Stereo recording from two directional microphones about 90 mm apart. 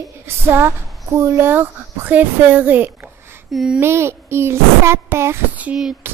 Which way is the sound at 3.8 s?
30° right (ahead or behind).